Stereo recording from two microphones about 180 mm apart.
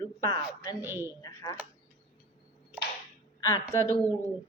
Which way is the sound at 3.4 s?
20° left (ahead or behind).